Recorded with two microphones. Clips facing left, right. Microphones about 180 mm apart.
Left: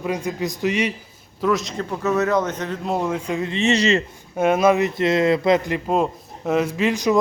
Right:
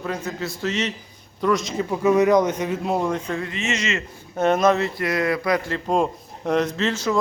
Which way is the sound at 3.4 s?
25° left (ahead or behind).